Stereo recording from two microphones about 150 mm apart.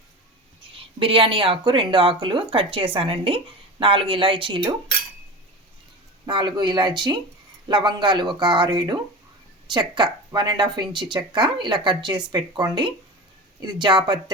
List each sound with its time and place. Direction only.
0.9 s speech: 35° right (ahead or behind)
6.2 s speech: 30° right (ahead or behind)